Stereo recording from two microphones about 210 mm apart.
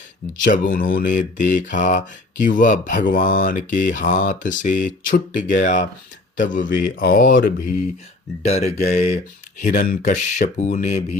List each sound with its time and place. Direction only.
0.4 s speech: 40° left (ahead or behind)